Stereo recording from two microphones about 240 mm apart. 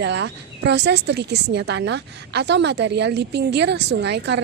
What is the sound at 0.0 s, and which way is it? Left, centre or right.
Speech, right.